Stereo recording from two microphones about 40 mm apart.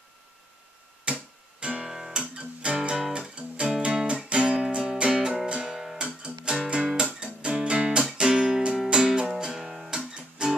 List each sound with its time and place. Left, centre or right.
1.1 s music: right
1.6 s guitar: right
1.9 s guitar: centre
2.3 s music: right
5.1 s music: centre
6.5 s music: right